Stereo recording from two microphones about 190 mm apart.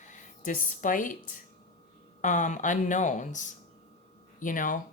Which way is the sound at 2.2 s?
40° left (ahead or behind).